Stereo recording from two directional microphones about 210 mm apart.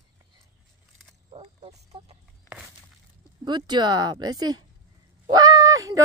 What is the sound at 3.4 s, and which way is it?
Speech, 20° right (ahead or behind).